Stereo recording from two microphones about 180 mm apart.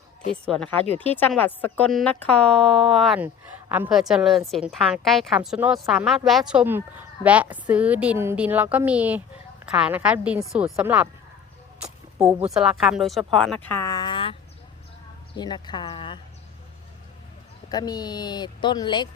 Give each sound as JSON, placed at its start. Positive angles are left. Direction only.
{"t": 0.4, "sound": "a woman's voice", "side_deg": 5}
{"t": 11.8, "sound": "a sound", "side_deg": -5}
{"t": 12.5, "sound": "a woman's voice", "side_deg": 0}
{"t": 15.4, "sound": "speech", "side_deg": 25}
{"t": 17.7, "sound": "speech", "side_deg": 20}